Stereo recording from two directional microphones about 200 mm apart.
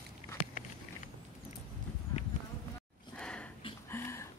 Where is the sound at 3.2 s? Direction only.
5° left (ahead or behind).